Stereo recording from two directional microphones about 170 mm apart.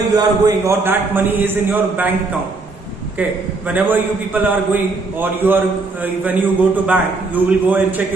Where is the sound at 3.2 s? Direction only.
10° right (ahead or behind).